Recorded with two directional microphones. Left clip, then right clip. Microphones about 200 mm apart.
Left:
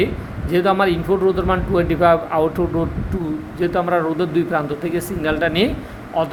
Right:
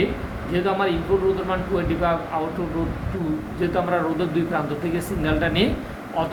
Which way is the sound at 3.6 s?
55° left (ahead or behind).